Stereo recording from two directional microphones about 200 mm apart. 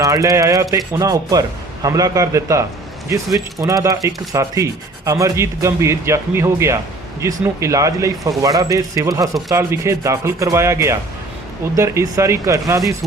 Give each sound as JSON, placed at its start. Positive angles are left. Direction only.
{"t": 0.0, "sound": "speech", "side_deg": -15}